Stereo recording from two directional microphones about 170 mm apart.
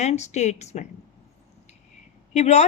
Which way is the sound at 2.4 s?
40° left (ahead or behind).